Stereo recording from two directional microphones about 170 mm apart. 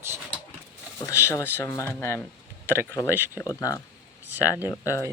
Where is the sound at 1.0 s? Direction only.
15° left (ahead or behind).